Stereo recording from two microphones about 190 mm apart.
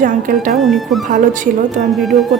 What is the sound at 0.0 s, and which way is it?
Speech, 45° right (ahead or behind).